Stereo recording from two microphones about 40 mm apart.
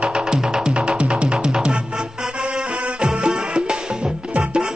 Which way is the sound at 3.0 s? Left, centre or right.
Right.